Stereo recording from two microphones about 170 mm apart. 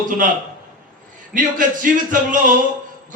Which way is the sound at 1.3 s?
50° right (ahead or behind).